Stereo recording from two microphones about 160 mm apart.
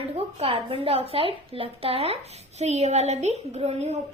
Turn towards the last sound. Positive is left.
turn(degrees=-40)  # may be behind; listen again after turning